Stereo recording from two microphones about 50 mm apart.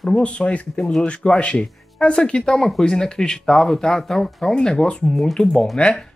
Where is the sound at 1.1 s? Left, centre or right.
Left.